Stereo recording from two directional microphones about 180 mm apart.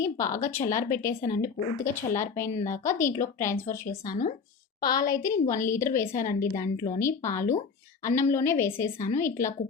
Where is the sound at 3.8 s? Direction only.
50° left (ahead or behind).